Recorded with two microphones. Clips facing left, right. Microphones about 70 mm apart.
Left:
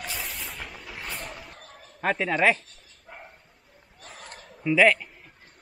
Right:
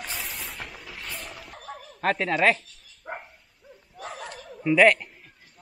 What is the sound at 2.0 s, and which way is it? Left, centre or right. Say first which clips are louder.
Speech: right 1 dB; centre.